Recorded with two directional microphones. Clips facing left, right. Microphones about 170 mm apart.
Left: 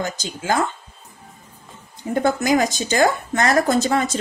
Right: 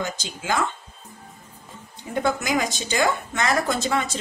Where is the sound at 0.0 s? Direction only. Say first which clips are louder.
Left 3 dB; 40° left (ahead or behind).